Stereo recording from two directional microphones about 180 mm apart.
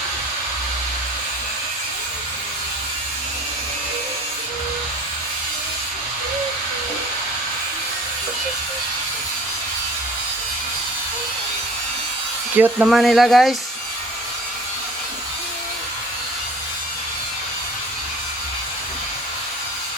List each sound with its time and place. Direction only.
12.5 s speech: 10° right (ahead or behind)